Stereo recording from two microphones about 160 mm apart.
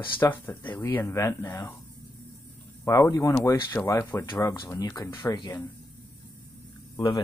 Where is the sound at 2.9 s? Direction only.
20° left (ahead or behind).